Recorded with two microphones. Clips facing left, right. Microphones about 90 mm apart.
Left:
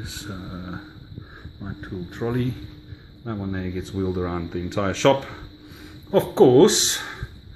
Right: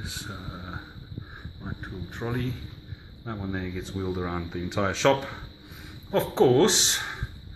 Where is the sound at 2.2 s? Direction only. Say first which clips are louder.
Left 6 dB; 30° left (ahead or behind).